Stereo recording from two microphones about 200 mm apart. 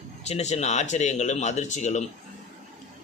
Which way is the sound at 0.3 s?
35° left (ahead or behind).